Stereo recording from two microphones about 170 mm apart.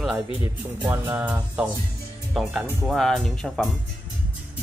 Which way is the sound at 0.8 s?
10° right (ahead or behind).